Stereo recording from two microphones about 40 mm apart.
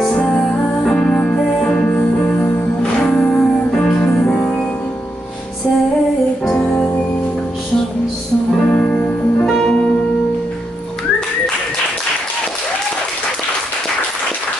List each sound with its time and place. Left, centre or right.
0.1 s music: left
0.5 s music: left
1.9 s music: left
6.5 s music: left
8.8 s music: left
9.5 s music: centre